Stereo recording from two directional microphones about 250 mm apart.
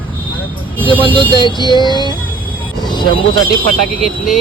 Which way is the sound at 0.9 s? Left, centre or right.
Centre.